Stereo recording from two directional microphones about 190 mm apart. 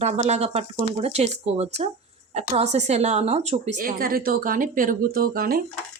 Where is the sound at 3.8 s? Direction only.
50° right (ahead or behind).